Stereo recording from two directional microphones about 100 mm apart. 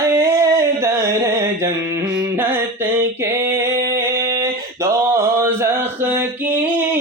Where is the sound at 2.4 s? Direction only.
20° right (ahead or behind).